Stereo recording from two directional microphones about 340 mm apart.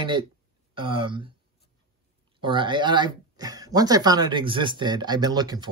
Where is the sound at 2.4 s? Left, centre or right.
Centre.